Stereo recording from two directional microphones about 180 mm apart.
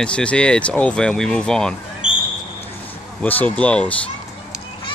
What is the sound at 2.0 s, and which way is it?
Basketball bounce, 45° right (ahead or behind).